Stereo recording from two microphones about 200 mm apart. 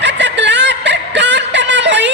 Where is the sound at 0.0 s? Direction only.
65° right (ahead or behind).